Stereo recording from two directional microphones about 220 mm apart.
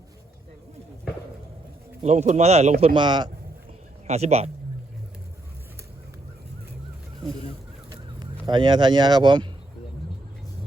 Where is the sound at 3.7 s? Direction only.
30° right (ahead or behind).